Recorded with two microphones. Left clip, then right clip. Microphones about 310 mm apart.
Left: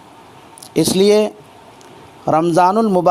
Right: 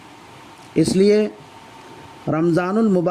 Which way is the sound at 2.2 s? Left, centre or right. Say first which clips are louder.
Left 7 dB; left.